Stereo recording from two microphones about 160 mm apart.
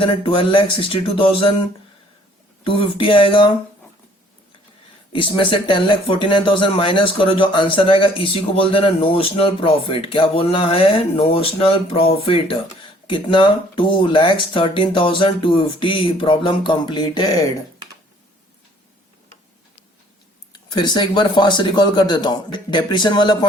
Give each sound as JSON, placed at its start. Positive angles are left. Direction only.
{"t": 0.0, "sound": "speech", "side_deg": 35}
{"t": 2.6, "sound": "speech", "side_deg": 35}
{"t": 5.1, "sound": "speech", "side_deg": 30}
{"t": 20.5, "sound": "speech", "side_deg": 25}